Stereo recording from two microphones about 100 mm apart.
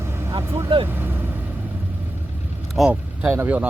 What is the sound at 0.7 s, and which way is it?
Speech, 65° right (ahead or behind).